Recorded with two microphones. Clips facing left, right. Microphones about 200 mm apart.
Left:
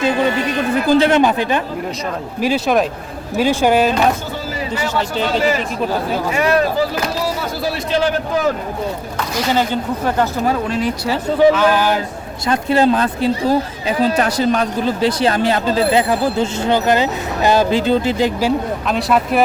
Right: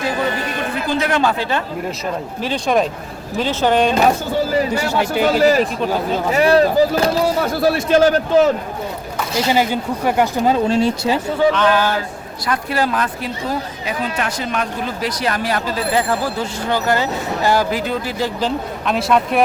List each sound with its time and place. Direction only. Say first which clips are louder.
0.0 s speech: left 4 dB; 25° left (ahead or behind)
2.4 s speech: left 2 dB; 5° left (ahead or behind)
4.7 s speech: right 2 dB; 10° right (ahead or behind)
5.4 s speech: right 3 dB; 40° right (ahead or behind)
7.6 s a man's voice: right 5 dB; 50° right (ahead or behind)
9.5 s speech: even; 15° right (ahead or behind)
11.5 s speech: left 1 dB; 10° left (ahead or behind)
12.5 s speech: left 6 dB; 25° left (ahead or behind)
18.3 s speech: left 4 dB; 5° left (ahead or behind)